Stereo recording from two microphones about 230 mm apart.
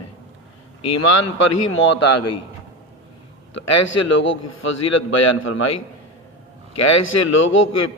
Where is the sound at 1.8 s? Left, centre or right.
Left.